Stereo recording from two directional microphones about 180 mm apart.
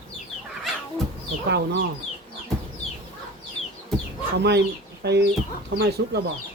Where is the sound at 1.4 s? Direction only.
70° right (ahead or behind).